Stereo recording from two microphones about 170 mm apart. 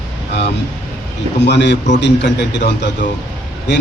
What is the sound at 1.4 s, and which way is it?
A man's voice, 90° left.